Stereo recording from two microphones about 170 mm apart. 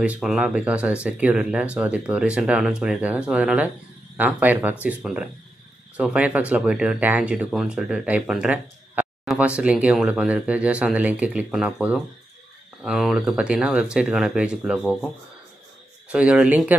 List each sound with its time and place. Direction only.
0.0 s speech: 5° right (ahead or behind)
16.1 s speech: 5° right (ahead or behind)